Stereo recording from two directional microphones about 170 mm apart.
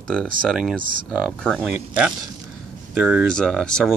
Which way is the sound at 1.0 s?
5° left (ahead or behind).